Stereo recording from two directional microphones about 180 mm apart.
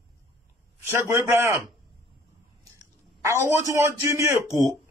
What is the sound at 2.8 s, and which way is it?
A man's voice, 15° right (ahead or behind).